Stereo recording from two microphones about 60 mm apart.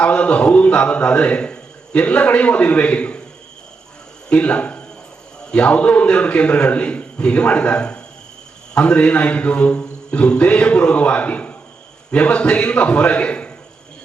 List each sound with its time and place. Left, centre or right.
0.0 s a man's voice: centre
4.3 s a man's voice: centre